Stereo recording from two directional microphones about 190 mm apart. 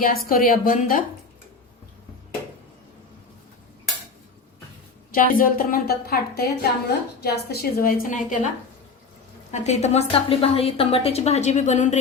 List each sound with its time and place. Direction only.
0.0 s speech: 50° left (ahead or behind)
5.1 s speech: 50° left (ahead or behind)
9.5 s a woman's voice: 35° left (ahead or behind)